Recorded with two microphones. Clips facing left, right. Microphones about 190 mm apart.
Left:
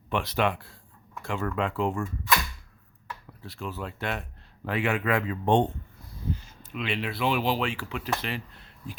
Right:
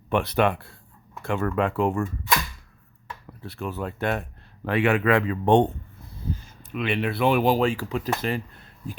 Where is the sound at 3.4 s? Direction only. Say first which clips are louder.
Right 5 dB; 55° right (ahead or behind).